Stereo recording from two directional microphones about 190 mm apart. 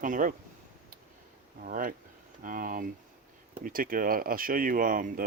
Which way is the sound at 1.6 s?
45° right (ahead or behind).